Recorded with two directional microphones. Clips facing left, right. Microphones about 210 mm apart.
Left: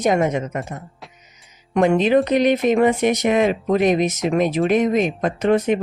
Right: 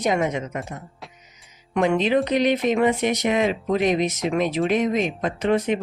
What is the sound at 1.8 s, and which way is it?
Speech, 50° left (ahead or behind).